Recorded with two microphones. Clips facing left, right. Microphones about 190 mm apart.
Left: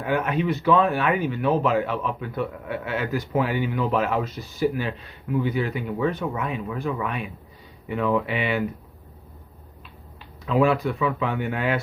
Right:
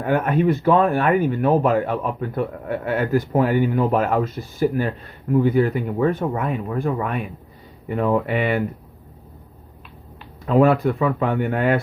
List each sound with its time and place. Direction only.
0.0 s speech: 50° right (ahead or behind)
10.4 s speech: 50° right (ahead or behind)